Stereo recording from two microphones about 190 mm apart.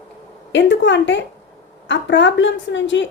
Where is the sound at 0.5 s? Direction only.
65° left (ahead or behind).